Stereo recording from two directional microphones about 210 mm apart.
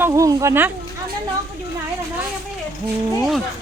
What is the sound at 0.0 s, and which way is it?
Speech, 15° right (ahead or behind).